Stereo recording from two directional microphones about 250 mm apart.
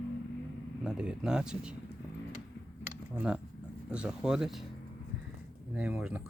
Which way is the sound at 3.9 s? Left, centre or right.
Centre.